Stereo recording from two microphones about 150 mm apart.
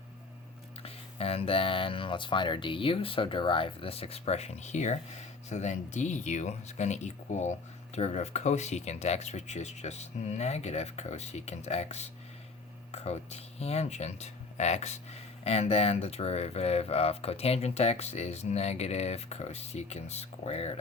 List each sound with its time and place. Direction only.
0.8 s speech: 40° left (ahead or behind)